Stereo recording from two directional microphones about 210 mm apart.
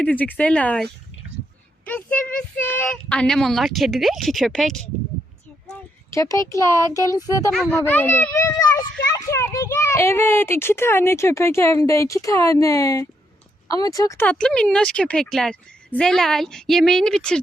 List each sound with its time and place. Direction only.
0.0 s a child's voice: 5° left (ahead or behind)
6.1 s a child's voice: 15° left (ahead or behind)